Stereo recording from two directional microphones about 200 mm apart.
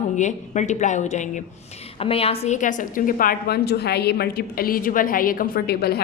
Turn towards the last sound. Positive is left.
turn(degrees=55)  # may be behind; listen again after turning